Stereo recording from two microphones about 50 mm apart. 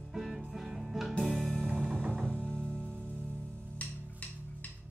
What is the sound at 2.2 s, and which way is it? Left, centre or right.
Music, centre.